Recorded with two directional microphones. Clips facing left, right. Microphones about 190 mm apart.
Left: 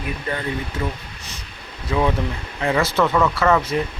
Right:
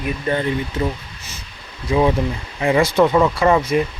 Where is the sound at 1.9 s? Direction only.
15° right (ahead or behind).